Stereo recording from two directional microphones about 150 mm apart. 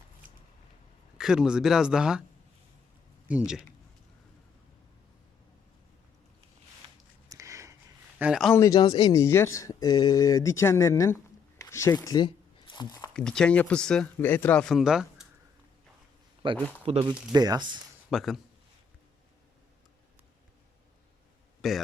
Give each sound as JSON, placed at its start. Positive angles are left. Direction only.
{"t": 0.2, "sound": "a sound", "side_deg": -65}
{"t": 1.2, "sound": "speech", "side_deg": -5}
{"t": 3.2, "sound": "speech", "side_deg": -5}
{"t": 6.8, "sound": "a sound", "side_deg": -40}
{"t": 7.3, "sound": "a sound", "side_deg": -20}
{"t": 8.2, "sound": "speech", "side_deg": -5}
{"t": 8.5, "sound": "speech", "side_deg": 20}
{"t": 9.2, "sound": "speech", "side_deg": 15}
{"t": 13.1, "sound": "speech", "side_deg": 5}
{"t": 16.4, "sound": "speech", "side_deg": -35}
{"t": 17.3, "sound": "speech", "side_deg": -25}
{"t": 18.1, "sound": "speech", "side_deg": 0}
{"t": 21.6, "sound": "speech", "side_deg": 0}